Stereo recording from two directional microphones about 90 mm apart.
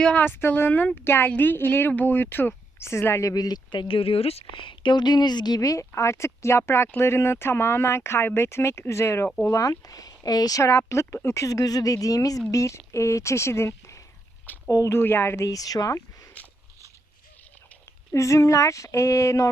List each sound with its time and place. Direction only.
0.0 s speech: 15° left (ahead or behind)
0.3 s speech: 25° left (ahead or behind); by 3.6 s 45° left (ahead or behind)
3.7 s a woman's voice: 75° left (ahead or behind); by 5.5 s 50° left (ahead or behind)
5.5 s speech: 40° left (ahead or behind)
18.1 s speech: 35° left (ahead or behind)